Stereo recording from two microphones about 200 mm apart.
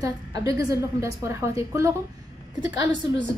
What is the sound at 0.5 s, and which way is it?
A woman's voice, 15° right (ahead or behind).